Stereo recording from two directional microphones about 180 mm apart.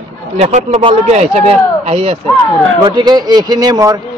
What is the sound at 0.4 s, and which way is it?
Speech, 40° right (ahead or behind).